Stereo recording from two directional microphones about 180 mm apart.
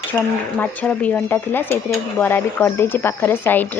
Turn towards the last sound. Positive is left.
turn(degrees=10)  # may be behind; listen again after turning